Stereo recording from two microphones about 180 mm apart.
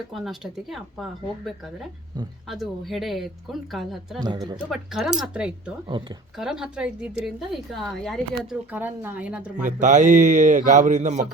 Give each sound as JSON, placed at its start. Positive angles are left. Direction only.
{"t": 0.1, "sound": "a woman's voice", "side_deg": 0}
{"t": 4.2, "sound": "speech", "side_deg": -25}
{"t": 4.5, "sound": "a woman's voice", "side_deg": 0}
{"t": 5.9, "sound": "speech", "side_deg": -25}
{"t": 6.3, "sound": "a woman's voice", "side_deg": -5}
{"t": 8.7, "sound": "a woman's voice", "side_deg": -10}
{"t": 9.6, "sound": "a man's voice", "side_deg": -45}